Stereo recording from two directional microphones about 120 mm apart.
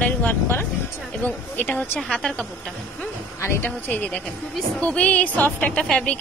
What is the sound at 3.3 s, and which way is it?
Speech, 25° left (ahead or behind).